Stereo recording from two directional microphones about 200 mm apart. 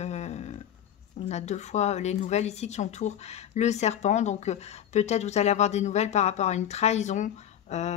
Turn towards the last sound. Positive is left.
turn(degrees=35)  # may be behind; listen again after turning